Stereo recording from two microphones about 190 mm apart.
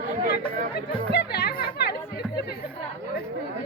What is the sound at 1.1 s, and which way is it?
Chatter, 60° left (ahead or behind).